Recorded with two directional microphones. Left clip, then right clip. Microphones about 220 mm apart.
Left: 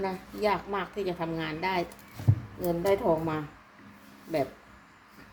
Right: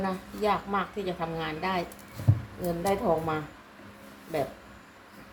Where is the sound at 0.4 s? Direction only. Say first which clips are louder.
Right 1 dB; 40° left (ahead or behind).